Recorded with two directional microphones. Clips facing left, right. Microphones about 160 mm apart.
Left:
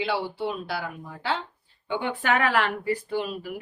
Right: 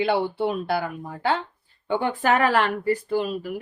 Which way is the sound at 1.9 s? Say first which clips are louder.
Right 4 dB; 40° right (ahead or behind).